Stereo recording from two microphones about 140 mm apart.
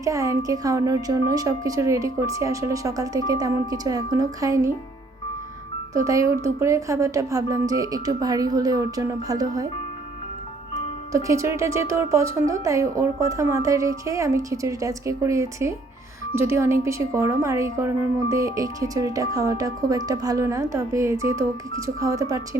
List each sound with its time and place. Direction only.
0.0 s speech: 25° right (ahead or behind)
6.1 s speech: 20° right (ahead or behind)
11.1 s speech: 25° right (ahead or behind)